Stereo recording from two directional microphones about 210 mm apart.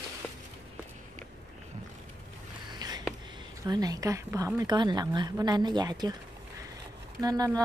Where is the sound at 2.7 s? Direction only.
20° right (ahead or behind).